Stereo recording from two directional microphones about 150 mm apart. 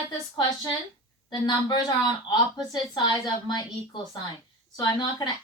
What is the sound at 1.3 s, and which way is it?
A woman's voice, 30° left (ahead or behind).